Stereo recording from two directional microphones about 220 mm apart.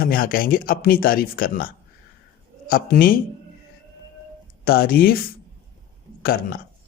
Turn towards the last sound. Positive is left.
turn(degrees=45)  # may be behind; listen again after turning